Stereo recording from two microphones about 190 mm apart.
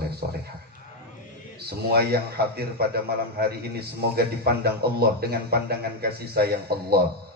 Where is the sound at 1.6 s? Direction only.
55° right (ahead or behind).